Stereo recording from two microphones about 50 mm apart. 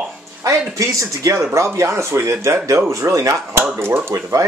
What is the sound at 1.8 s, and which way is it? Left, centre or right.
Speech, right.